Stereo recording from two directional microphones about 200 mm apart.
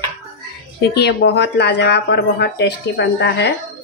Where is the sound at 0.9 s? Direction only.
55° left (ahead or behind).